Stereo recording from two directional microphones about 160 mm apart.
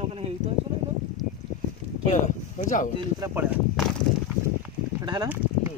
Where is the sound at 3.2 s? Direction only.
15° right (ahead or behind).